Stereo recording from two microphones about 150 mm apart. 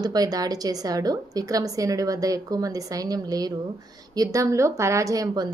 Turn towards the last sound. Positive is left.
turn(degrees=-25)  # may be behind; listen again after turning